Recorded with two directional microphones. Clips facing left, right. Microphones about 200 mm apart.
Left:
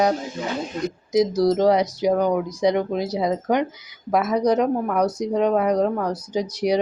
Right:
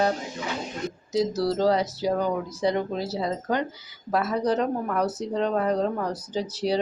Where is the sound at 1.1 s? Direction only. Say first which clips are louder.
Left 6 dB; 15° left (ahead or behind).